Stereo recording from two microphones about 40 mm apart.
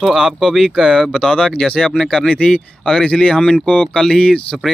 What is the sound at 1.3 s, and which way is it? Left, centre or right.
Speech, left.